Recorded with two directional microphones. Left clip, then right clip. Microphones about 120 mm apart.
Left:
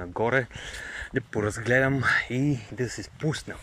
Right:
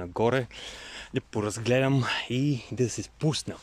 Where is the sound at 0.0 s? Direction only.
15° right (ahead or behind).